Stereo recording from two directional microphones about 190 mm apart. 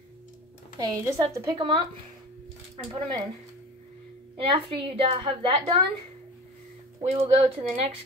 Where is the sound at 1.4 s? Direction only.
20° right (ahead or behind).